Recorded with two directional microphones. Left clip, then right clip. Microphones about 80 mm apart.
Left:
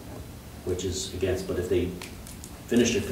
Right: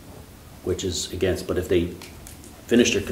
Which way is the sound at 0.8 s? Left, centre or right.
Right.